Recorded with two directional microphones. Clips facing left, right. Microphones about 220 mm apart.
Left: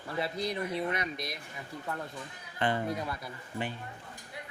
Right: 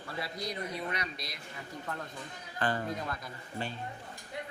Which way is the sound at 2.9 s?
15° left (ahead or behind).